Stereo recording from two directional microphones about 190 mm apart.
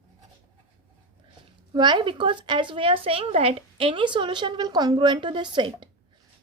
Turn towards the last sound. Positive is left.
turn(degrees=-25)  # may be behind; listen again after turning